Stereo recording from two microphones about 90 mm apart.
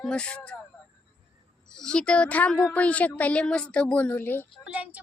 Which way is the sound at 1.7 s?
10° left (ahead or behind).